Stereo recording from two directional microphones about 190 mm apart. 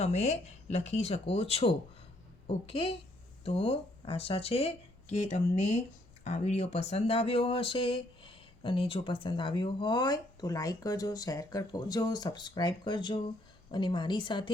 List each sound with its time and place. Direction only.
0.0 s speech: 35° left (ahead or behind)